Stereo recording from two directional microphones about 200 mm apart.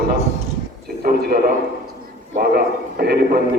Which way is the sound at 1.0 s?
50° right (ahead or behind).